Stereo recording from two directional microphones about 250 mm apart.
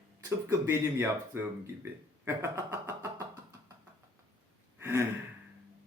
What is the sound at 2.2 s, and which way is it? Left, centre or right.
Speech, centre.